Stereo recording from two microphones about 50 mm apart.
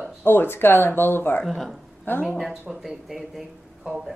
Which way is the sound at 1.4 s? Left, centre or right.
Centre.